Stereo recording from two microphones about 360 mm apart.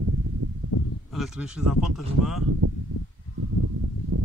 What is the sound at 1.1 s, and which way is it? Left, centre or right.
Speech, centre.